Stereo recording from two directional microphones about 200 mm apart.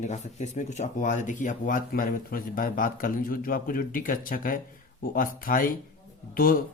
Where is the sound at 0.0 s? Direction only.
35° left (ahead or behind).